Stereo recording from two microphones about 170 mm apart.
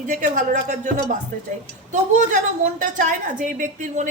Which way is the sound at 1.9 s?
45° right (ahead or behind).